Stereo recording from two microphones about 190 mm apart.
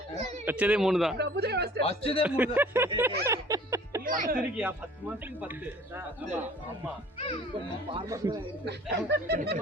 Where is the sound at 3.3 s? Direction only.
15° right (ahead or behind).